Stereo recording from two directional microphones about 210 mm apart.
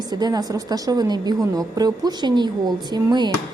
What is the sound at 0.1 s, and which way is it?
A woman's voice, 20° right (ahead or behind).